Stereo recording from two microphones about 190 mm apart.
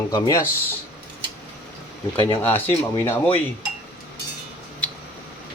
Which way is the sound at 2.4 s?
10° left (ahead or behind).